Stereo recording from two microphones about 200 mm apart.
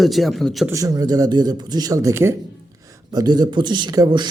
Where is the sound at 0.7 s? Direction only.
20° right (ahead or behind).